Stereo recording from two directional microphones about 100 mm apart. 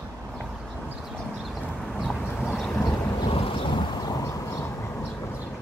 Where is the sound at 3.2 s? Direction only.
70° left (ahead or behind).